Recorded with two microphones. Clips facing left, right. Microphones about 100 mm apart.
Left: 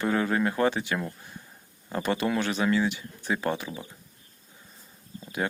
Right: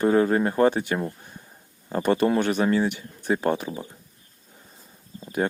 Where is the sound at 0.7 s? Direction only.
45° right (ahead or behind).